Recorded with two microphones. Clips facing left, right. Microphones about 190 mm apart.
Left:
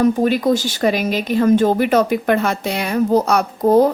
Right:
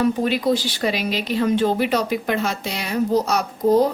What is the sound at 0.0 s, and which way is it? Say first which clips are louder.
Speech: left 4 dB; 45° left (ahead or behind).